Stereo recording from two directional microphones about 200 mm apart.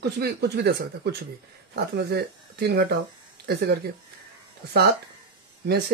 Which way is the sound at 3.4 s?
55° right (ahead or behind).